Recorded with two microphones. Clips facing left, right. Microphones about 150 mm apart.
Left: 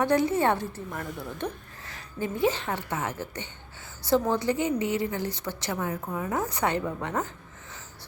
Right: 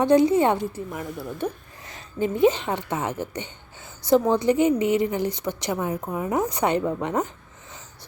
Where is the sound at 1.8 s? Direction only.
20° right (ahead or behind).